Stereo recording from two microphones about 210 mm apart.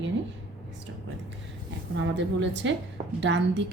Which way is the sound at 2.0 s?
60° right (ahead or behind).